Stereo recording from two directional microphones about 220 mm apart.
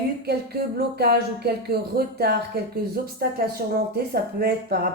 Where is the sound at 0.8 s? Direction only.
45° right (ahead or behind).